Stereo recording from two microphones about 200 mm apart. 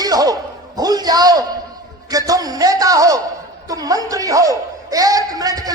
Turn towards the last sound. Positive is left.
turn(degrees=-20)  # may be behind; listen again after turning